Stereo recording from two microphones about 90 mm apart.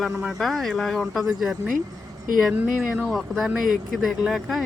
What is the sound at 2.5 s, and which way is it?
Speech, 15° right (ahead or behind).